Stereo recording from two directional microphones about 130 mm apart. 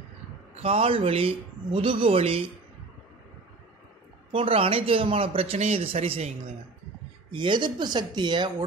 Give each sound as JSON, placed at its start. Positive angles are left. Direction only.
{"t": 0.6, "sound": "a man's voice", "side_deg": -50}
{"t": 4.3, "sound": "a man's voice", "side_deg": -45}
{"t": 7.3, "sound": "speech", "side_deg": -40}